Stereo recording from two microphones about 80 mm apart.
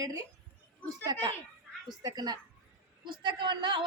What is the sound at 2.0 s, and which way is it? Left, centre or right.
Speech, right.